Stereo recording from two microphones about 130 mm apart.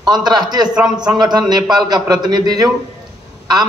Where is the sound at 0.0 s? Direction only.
30° right (ahead or behind).